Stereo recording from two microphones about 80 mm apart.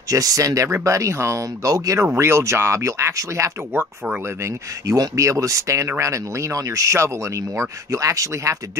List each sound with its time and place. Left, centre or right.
0.1 s speech: right
4.8 s speech: right